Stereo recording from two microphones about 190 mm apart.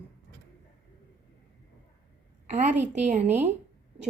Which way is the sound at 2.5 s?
40° right (ahead or behind).